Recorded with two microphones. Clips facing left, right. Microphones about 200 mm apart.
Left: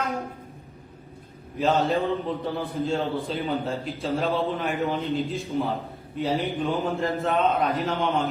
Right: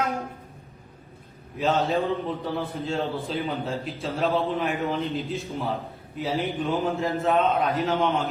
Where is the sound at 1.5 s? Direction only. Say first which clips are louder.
Left 1 dB; centre (ahead or behind).